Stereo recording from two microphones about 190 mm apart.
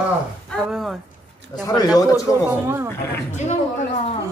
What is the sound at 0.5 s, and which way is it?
Speech, centre (ahead or behind).